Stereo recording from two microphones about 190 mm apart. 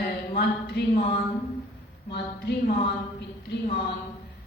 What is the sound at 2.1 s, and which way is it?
A woman's voice, 60° left (ahead or behind).